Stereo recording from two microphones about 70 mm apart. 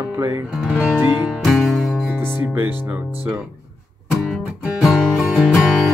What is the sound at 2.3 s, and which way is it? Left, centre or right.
Speech, right.